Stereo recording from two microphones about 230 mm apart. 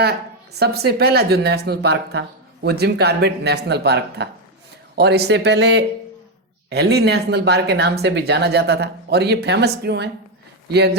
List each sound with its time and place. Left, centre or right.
0.6 s speech: right